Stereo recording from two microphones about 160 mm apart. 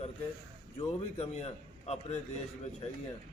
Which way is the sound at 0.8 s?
40° left (ahead or behind).